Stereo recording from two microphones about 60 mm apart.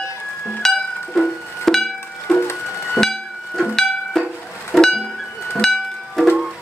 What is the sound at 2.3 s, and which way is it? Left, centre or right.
Music, left.